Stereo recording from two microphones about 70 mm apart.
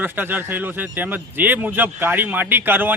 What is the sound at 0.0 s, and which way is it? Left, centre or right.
Speech, right.